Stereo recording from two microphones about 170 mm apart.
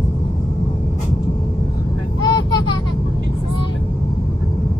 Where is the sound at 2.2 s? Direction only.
25° left (ahead or behind).